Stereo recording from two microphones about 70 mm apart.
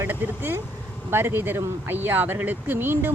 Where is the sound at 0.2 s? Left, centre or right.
Right.